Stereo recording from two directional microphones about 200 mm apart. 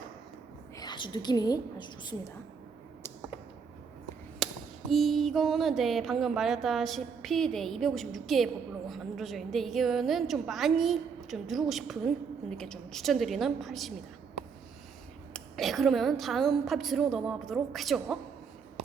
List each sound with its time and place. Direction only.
0.8 s a woman's voice: 20° left (ahead or behind)
4.4 s a sound: centre (ahead or behind)
4.9 s a woman's voice: centre (ahead or behind)
15.3 s a woman's voice: centre (ahead or behind)